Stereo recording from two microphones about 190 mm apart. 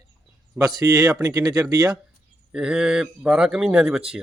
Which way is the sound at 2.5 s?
5° right (ahead or behind).